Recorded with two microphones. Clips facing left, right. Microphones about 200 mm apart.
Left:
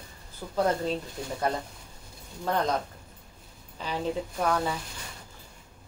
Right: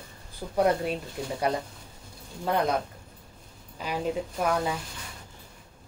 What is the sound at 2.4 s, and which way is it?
Speech, 10° right (ahead or behind).